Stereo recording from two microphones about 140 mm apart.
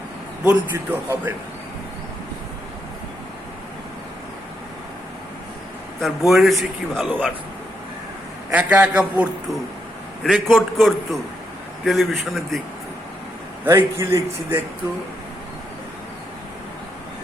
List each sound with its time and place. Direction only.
0.4 s a man's voice: 15° right (ahead or behind)
6.0 s a man's voice: centre (ahead or behind)
8.4 s a man's voice: 10° right (ahead or behind)
10.2 s a man's voice: centre (ahead or behind)
13.7 s a man's voice: 20° right (ahead or behind)